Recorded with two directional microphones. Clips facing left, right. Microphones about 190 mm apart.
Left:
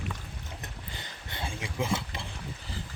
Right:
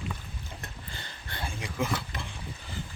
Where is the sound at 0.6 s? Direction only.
20° left (ahead or behind).